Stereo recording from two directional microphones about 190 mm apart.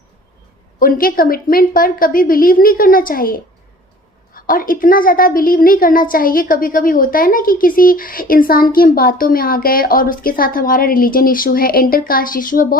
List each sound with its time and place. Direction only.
0.8 s a woman's voice: 45° left (ahead or behind)